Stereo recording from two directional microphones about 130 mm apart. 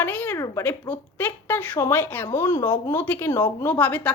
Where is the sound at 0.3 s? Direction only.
20° left (ahead or behind).